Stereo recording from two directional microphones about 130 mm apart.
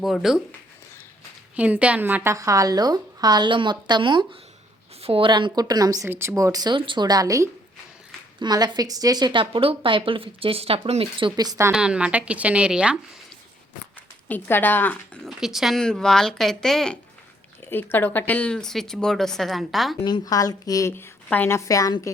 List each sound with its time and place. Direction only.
0.0 s a woman's voice: centre (ahead or behind)
1.5 s a woman's voice: 10° right (ahead or behind); by 11.3 s 45° right (ahead or behind)
11.3 s speech: 25° right (ahead or behind)
11.7 s a woman's voice: 5° right (ahead or behind)
14.3 s speech: 15° left (ahead or behind)
15.2 s a woman's voice: centre (ahead or behind)
17.7 s a woman's voice: 15° left (ahead or behind); by 20.0 s centre (ahead or behind)
20.1 s speech: 30° left (ahead or behind)